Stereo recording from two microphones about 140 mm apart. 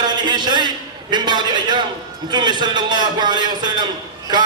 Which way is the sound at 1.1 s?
30° right (ahead or behind).